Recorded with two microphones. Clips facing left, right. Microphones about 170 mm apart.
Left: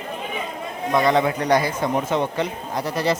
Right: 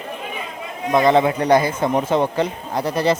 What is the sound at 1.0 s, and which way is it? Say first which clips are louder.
A man's voice: right 5 dB; 25° right (ahead or behind).